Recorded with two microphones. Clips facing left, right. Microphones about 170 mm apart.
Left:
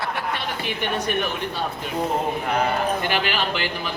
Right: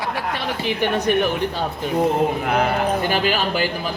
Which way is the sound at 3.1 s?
40° right (ahead or behind).